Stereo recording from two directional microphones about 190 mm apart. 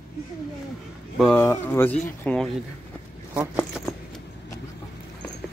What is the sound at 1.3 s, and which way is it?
Speech, 10° left (ahead or behind).